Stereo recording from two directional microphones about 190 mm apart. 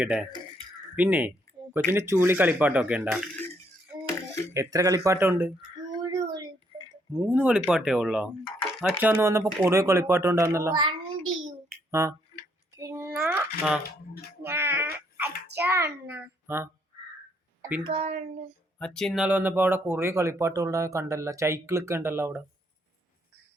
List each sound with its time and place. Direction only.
0.0 s speech: 5° right (ahead or behind)
4.5 s speech: 15° right (ahead or behind)
6.0 s a sound: 20° right (ahead or behind)
7.1 s speech: 10° right (ahead or behind)
11.9 s finger snapping: 15° right (ahead or behind)
12.7 s a sound: 15° right (ahead or behind)
14.4 s wail: 10° right (ahead or behind)
15.5 s speech: 10° right (ahead or behind)
17.6 s a sound: 10° right (ahead or behind)
17.8 s a child's voice: 30° right (ahead or behind)
18.8 s speech: 5° left (ahead or behind)